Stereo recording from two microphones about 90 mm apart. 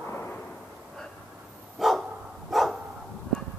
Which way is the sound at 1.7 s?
Centre (ahead or behind).